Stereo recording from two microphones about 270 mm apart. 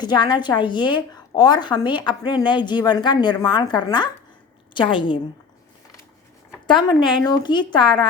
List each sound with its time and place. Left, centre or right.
0.0 s a woman's voice: centre
6.7 s a woman's voice: centre